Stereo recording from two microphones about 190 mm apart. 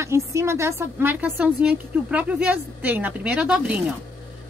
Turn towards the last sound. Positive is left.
turn(degrees=-5)  # may be behind; listen again after turning